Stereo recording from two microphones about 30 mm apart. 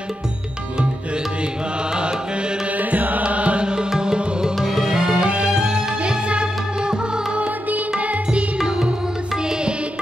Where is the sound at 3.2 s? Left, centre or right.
Right.